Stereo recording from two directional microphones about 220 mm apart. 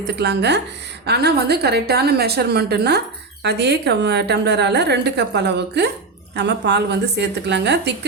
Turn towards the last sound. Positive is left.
turn(degrees=-50)  # may be behind; listen again after turning